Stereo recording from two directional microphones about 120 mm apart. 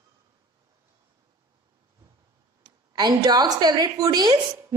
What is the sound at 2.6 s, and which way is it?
A woman's voice, 35° right (ahead or behind).